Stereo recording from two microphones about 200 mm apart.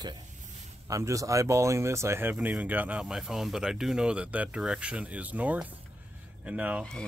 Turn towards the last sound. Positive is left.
turn(degrees=-5)  # may be behind; listen again after turning